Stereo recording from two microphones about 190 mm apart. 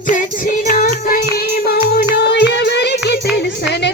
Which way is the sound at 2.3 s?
65° left (ahead or behind).